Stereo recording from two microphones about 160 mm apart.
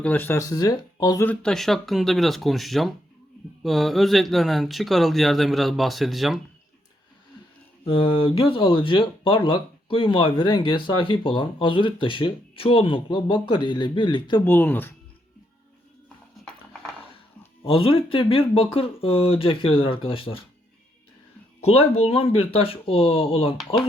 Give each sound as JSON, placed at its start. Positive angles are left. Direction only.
{"t": 0.0, "sound": "speech", "side_deg": 10}
{"t": 1.2, "sound": "speech", "side_deg": 10}
{"t": 7.9, "sound": "speech", "side_deg": 35}
{"t": 14.4, "sound": "speech", "side_deg": 10}
{"t": 17.6, "sound": "speech", "side_deg": 35}
{"t": 21.6, "sound": "speech", "side_deg": 40}